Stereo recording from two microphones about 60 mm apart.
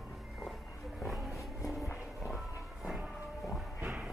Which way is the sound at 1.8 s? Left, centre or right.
Left.